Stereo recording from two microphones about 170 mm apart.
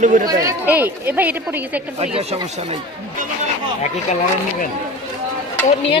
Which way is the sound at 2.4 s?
35° right (ahead or behind).